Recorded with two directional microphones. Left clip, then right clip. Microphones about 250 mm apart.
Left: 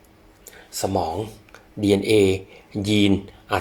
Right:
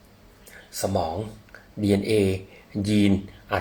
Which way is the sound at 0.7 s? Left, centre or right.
Centre.